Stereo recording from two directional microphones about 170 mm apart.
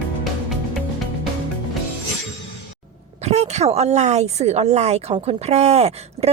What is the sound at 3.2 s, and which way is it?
Speech, 40° right (ahead or behind).